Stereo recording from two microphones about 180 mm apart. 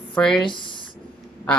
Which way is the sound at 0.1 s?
5° left (ahead or behind).